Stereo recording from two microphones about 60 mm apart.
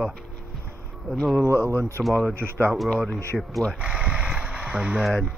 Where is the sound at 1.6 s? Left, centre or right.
Left.